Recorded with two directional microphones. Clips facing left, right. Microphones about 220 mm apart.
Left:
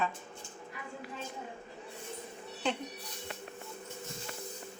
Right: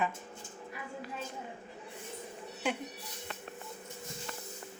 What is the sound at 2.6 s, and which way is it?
Speech, 10° right (ahead or behind).